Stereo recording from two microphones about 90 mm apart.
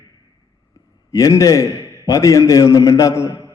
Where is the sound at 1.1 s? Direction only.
35° left (ahead or behind).